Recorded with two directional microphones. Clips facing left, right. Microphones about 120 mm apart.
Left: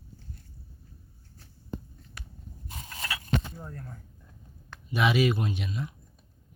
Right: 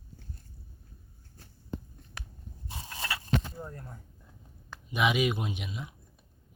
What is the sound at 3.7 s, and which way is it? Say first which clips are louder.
Speech: left 2 dB; 15° right (ahead or behind).